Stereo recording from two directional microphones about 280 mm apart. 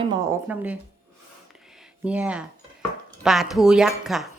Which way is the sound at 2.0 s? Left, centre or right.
Centre.